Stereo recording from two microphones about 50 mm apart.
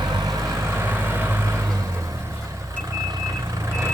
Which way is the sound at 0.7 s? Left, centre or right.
Right.